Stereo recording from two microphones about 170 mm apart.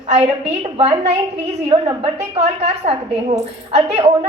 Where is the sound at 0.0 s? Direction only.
40° right (ahead or behind).